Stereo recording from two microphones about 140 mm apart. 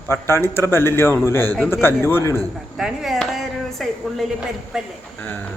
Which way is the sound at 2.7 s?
Centre (ahead or behind).